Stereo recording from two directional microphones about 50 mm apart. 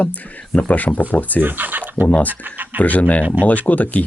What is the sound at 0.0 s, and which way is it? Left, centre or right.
Speech, left.